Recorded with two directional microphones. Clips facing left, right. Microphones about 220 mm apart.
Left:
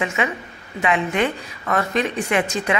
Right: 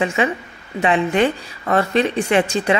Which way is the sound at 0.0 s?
30° right (ahead or behind).